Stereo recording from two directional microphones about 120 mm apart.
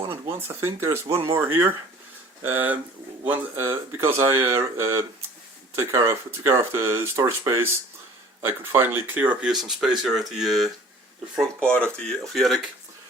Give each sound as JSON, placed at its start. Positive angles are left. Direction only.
{"t": 0.0, "sound": "speech", "side_deg": -20}
{"t": 9.5, "sound": "speech", "side_deg": -5}